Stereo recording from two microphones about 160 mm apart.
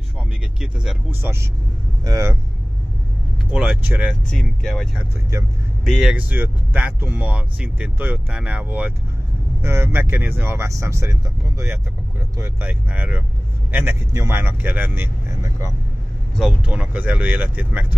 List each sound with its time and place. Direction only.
0.6 s speech: 5° right (ahead or behind)
1.2 s speech: 15° right (ahead or behind)
3.4 s speech: 5° right (ahead or behind)
4.3 s speech: 5° left (ahead or behind); by 15.7 s 15° right (ahead or behind)
16.3 s speech: 5° right (ahead or behind)